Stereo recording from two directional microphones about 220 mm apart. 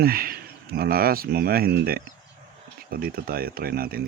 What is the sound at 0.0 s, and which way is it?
Speech, 40° right (ahead or behind).